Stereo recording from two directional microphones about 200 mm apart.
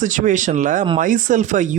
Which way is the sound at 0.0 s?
40° right (ahead or behind).